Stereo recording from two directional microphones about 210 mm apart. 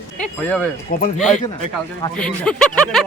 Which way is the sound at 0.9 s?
45° left (ahead or behind).